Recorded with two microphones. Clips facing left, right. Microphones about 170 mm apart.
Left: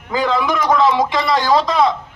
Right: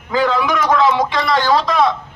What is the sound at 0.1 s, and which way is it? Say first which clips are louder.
A man's voice: right 1 dB; 10° left (ahead or behind).